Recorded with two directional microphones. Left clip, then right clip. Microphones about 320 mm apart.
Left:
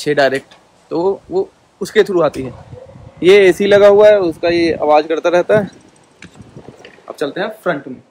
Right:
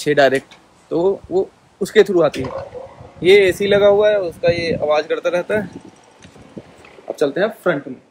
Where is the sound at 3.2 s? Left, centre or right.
Left.